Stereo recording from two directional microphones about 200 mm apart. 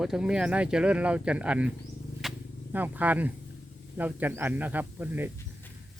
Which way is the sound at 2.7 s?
10° right (ahead or behind).